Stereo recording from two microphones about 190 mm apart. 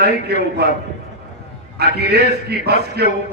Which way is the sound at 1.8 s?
60° right (ahead or behind).